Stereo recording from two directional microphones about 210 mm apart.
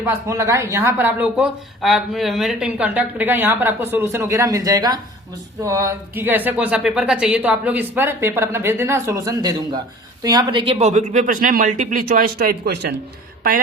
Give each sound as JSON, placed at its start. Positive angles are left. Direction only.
{"t": 0.0, "sound": "speech", "side_deg": -15}